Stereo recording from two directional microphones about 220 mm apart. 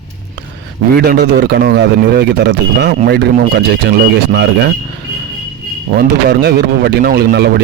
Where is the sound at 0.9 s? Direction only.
45° right (ahead or behind).